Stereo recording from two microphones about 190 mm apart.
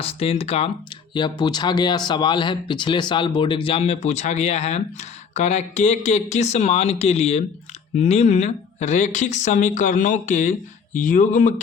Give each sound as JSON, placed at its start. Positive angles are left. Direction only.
{"t": 0.0, "sound": "speech", "side_deg": 30}